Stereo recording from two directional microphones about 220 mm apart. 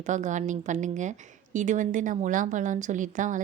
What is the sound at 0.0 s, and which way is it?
A woman's voice, 35° right (ahead or behind).